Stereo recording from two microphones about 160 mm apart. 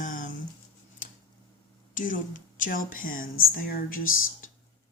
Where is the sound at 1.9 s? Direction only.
55° left (ahead or behind).